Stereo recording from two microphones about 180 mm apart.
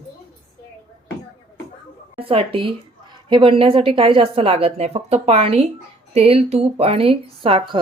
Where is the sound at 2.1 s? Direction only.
30° right (ahead or behind).